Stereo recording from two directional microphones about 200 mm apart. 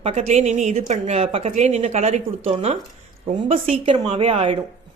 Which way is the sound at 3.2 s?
30° right (ahead or behind).